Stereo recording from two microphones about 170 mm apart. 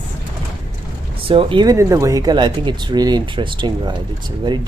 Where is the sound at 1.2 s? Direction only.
30° right (ahead or behind).